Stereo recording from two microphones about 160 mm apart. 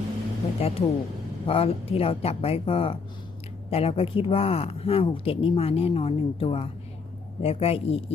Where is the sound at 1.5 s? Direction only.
35° left (ahead or behind).